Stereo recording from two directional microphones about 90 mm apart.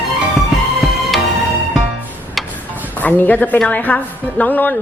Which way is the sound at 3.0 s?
20° left (ahead or behind).